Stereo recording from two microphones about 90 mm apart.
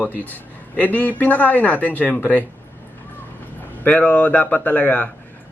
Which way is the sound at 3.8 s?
15° left (ahead or behind).